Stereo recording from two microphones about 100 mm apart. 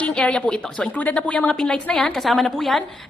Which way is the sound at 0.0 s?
10° left (ahead or behind).